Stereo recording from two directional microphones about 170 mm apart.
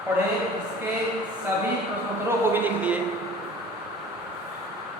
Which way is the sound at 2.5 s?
10° right (ahead or behind).